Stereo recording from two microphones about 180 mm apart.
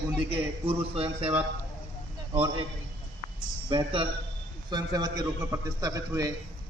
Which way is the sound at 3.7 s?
30° right (ahead or behind).